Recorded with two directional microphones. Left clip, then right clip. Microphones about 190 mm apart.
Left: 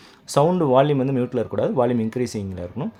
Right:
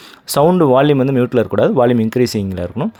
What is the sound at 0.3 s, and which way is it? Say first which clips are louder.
Speech: right 7 dB; 35° right (ahead or behind).